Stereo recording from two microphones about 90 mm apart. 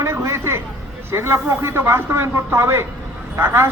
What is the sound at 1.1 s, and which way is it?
A man's voice, 25° right (ahead or behind).